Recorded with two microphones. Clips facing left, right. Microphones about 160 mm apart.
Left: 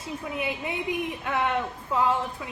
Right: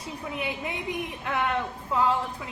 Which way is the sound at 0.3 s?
25° left (ahead or behind).